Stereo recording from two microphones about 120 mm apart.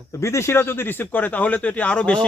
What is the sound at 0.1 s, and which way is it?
Speech, 25° left (ahead or behind).